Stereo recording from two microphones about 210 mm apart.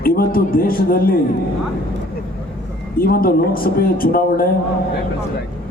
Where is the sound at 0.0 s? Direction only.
45° left (ahead or behind).